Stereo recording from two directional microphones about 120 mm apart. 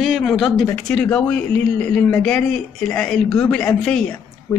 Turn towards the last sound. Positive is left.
turn(degrees=10)  # may be behind; listen again after turning